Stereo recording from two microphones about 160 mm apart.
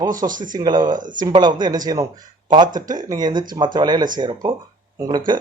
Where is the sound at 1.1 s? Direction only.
25° right (ahead or behind).